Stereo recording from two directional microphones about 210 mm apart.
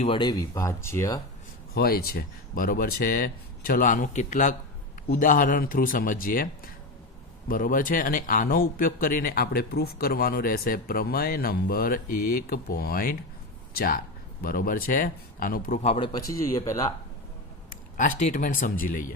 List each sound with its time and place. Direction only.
0.0 s speech: 25° left (ahead or behind)
1.7 s a man's voice: 45° left (ahead or behind); by 16.9 s 15° left (ahead or behind)
17.9 s speech: 35° left (ahead or behind)